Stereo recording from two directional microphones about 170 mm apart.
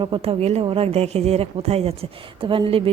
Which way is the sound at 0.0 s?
30° right (ahead or behind).